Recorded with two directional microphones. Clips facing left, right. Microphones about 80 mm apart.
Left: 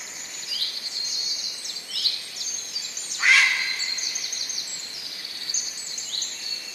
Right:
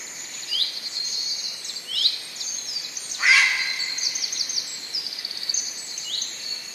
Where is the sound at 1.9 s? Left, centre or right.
Centre.